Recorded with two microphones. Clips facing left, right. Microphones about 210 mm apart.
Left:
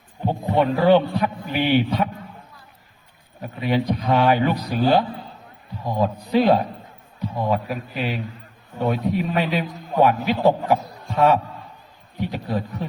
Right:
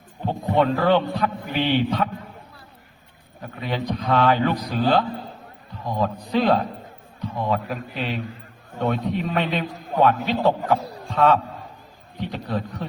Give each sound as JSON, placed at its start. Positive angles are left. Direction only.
{"t": 0.3, "sound": "a man's voice", "side_deg": 10}
{"t": 3.4, "sound": "a man's voice", "side_deg": 15}
{"t": 10.8, "sound": "a sound", "side_deg": -35}
{"t": 11.1, "sound": "a man's voice", "side_deg": 10}